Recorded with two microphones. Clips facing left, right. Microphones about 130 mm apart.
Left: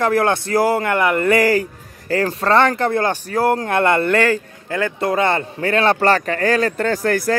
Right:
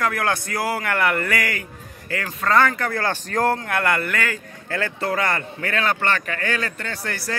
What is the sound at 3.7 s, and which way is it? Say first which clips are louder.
Speech: left 7 dB; 25° left (ahead or behind).